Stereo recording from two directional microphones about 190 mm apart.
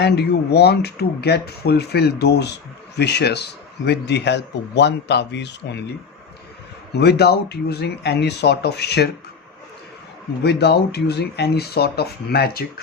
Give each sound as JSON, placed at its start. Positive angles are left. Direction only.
{"t": 0.0, "sound": "speech", "side_deg": 60}
{"t": 6.9, "sound": "speech", "side_deg": 60}
{"t": 10.4, "sound": "speech", "side_deg": 60}